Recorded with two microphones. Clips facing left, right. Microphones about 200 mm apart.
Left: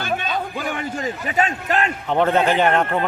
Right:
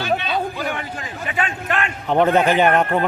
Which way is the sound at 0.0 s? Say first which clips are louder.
Right 3 dB; 50° left (ahead or behind).